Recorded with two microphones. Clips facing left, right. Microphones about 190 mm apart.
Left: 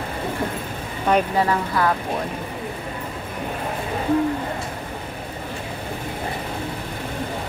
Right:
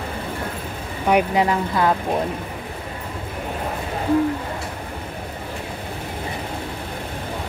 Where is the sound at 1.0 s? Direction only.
15° right (ahead or behind).